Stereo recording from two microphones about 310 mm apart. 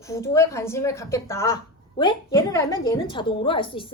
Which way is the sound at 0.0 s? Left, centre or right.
Centre.